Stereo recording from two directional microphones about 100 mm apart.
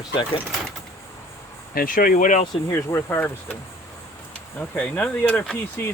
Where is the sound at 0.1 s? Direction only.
55° left (ahead or behind).